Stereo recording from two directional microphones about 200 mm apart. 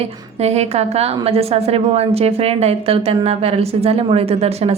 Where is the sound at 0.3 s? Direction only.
30° right (ahead or behind).